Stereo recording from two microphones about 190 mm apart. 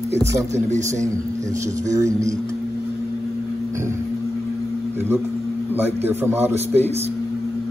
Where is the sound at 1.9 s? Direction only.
15° right (ahead or behind).